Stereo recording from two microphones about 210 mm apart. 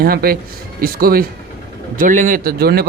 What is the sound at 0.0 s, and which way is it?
A man's voice, 45° right (ahead or behind).